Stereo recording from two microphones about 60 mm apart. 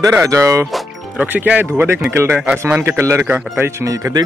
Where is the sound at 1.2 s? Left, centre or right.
Right.